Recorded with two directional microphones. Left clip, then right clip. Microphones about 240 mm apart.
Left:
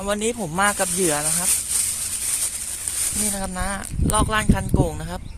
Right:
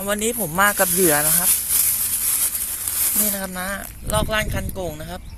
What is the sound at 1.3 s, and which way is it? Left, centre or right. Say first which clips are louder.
Speech: right 1 dB; right.